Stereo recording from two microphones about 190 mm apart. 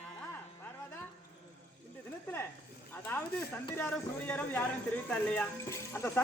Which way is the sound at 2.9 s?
10° left (ahead or behind).